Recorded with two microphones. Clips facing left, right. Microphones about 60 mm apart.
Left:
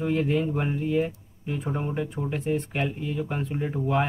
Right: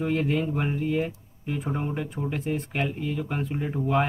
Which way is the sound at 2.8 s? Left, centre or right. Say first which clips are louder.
Even; right.